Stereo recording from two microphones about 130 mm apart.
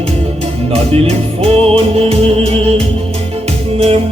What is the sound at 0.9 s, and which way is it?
Music, 50° right (ahead or behind).